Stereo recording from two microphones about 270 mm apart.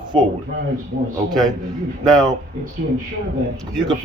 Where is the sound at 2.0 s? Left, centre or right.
Centre.